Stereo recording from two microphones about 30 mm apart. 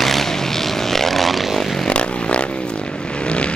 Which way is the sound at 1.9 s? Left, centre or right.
Left.